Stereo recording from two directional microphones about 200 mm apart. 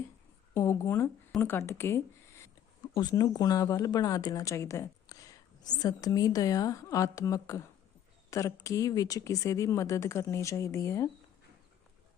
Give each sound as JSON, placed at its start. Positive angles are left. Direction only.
{"t": 0.5, "sound": "a woman's voice", "side_deg": 15}